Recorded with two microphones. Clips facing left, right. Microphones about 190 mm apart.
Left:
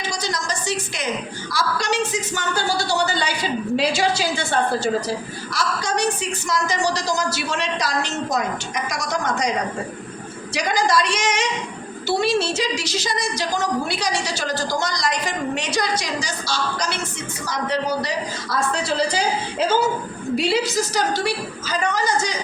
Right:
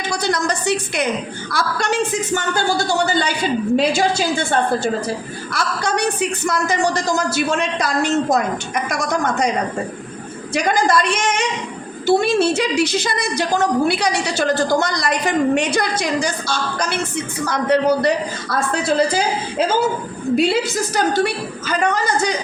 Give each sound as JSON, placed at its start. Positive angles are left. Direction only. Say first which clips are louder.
{"t": 0.1, "sound": "a woman's voice", "louder": "right 9 dB", "side_deg": -60}
{"t": 10.5, "sound": "a woman's voice", "louder": "right 3 dB", "side_deg": -55}